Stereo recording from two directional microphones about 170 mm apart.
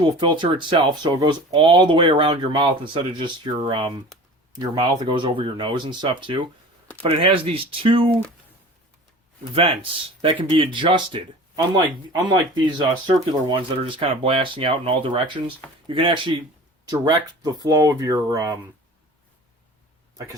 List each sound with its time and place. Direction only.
0.0 s speech: 30° right (ahead or behind)
10.2 s speech: 30° right (ahead or behind)